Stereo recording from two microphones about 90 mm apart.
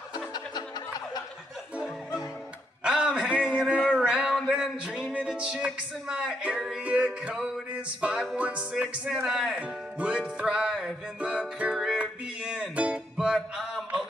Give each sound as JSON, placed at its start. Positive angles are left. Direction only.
{"t": 0.1, "sound": "music", "side_deg": 50}
{"t": 2.8, "sound": "a sound", "side_deg": -10}
{"t": 5.1, "sound": "music", "side_deg": -10}